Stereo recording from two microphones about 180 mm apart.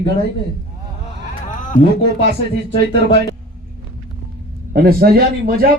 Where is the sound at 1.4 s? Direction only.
45° left (ahead or behind).